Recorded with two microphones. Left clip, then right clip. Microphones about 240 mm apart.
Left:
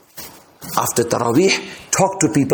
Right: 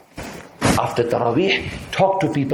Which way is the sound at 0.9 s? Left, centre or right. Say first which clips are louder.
Left 1 dB; left.